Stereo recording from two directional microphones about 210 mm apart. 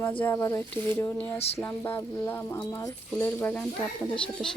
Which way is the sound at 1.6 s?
10° left (ahead or behind).